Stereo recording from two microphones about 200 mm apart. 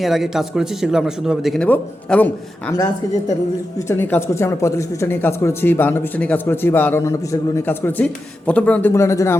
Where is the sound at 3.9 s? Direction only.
10° left (ahead or behind).